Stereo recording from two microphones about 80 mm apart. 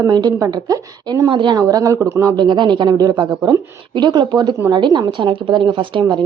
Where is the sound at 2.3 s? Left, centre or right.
Right.